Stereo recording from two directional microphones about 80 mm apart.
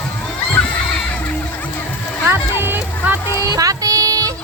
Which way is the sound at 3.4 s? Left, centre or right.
Right.